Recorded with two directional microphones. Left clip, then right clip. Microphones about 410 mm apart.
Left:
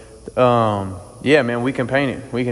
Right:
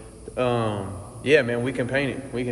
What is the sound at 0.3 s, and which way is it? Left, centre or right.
A man's voice, centre.